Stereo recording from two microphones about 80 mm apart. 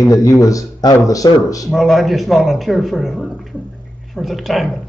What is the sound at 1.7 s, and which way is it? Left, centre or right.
Speech, centre.